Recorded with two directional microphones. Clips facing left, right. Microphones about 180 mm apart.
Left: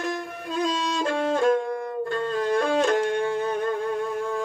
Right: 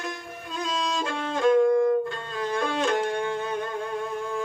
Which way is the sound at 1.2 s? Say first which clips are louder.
Right 1 dB; 40° left (ahead or behind).